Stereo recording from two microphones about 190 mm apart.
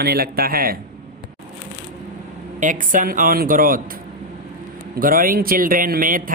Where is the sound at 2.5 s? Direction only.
45° right (ahead or behind).